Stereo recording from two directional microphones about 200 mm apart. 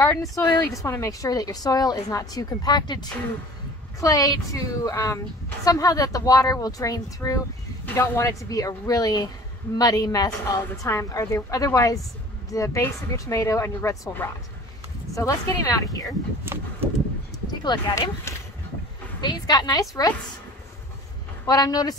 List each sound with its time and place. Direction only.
0.0 s a woman's voice: 15° left (ahead or behind)
17.5 s a woman's voice: 20° left (ahead or behind)
21.5 s a woman's voice: 20° left (ahead or behind)